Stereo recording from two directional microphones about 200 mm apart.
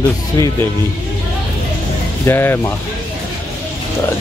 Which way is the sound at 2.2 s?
10° left (ahead or behind).